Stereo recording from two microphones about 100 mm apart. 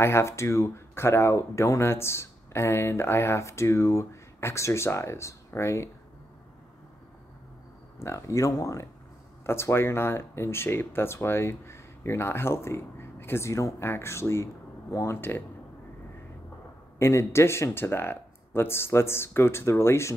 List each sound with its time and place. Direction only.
0.0 s speech: 25° left (ahead or behind)
8.0 s speech: 30° left (ahead or behind)
15.1 s speech: 20° left (ahead or behind)
17.0 s speech: 25° left (ahead or behind)